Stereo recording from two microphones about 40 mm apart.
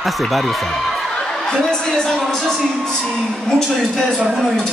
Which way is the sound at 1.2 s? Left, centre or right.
Centre.